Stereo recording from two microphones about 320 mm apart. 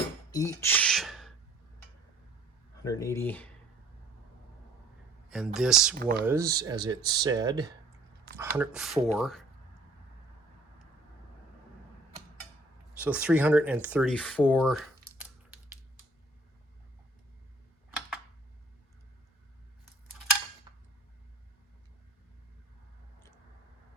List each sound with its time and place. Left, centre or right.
0.3 s a sound: centre
2.8 s speech: centre
5.3 s speech: centre
6.0 s speech: right
6.2 s speech: centre
13.0 s speech: centre
20.7 s a sound: centre